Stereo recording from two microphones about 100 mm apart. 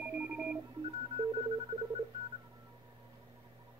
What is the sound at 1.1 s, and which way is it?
Telephone dialing, 55° right (ahead or behind).